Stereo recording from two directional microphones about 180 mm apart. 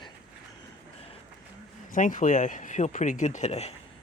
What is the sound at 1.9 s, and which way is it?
Speech, 45° left (ahead or behind).